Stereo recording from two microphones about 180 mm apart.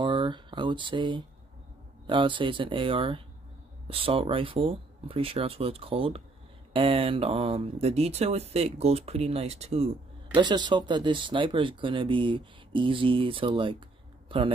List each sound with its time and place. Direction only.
0.0 s a sound: 25° right (ahead or behind)
2.0 s speech: 25° right (ahead or behind)
10.3 s a man's voice: 25° right (ahead or behind)